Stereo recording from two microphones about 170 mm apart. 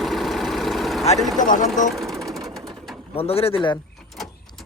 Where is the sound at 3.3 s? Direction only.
35° left (ahead or behind).